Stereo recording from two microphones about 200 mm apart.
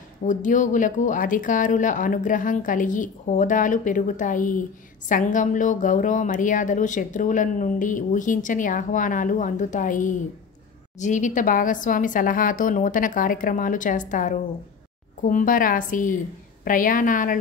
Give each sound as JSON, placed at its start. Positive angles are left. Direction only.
{"t": 0.2, "sound": "a woman's voice", "side_deg": 40}